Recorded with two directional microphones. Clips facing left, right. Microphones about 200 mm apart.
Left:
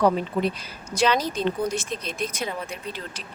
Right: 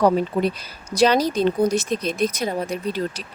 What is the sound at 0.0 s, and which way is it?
Speech, 40° right (ahead or behind).